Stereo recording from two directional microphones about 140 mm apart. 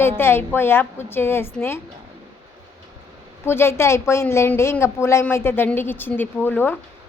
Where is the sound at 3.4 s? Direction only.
15° left (ahead or behind).